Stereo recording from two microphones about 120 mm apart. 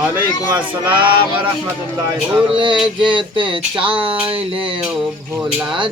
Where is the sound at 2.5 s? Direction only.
40° right (ahead or behind).